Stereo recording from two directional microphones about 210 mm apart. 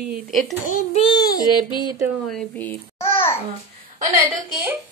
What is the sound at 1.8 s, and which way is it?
Speech, 15° right (ahead or behind).